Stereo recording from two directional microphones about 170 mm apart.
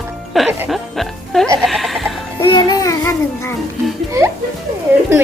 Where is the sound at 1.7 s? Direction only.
Centre (ahead or behind).